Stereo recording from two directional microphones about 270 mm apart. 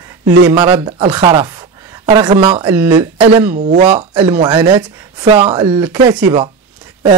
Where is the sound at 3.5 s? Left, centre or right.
Right.